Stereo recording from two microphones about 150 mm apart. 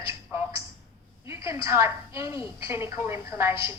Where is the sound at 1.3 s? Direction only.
20° right (ahead or behind).